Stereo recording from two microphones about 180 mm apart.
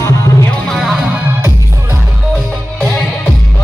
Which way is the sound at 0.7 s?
Centre (ahead or behind).